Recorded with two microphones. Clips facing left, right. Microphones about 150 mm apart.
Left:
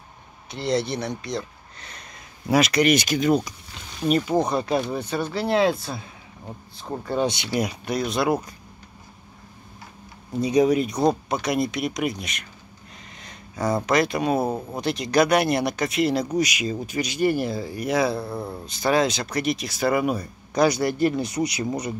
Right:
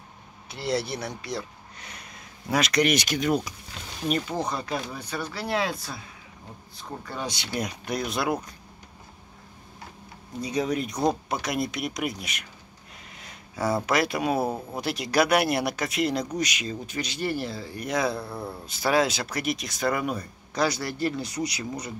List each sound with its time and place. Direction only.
0.5 s speech: 5° right (ahead or behind)
2.4 s speech: 5° left (ahead or behind)
4.3 s speech: 20° left (ahead or behind)
7.5 s speech: 5° left (ahead or behind)
10.4 s speech: 15° left (ahead or behind)
11.4 s speech: centre (ahead or behind); by 21.9 s 20° left (ahead or behind)